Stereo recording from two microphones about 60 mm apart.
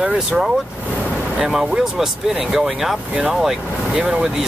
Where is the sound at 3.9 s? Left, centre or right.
Centre.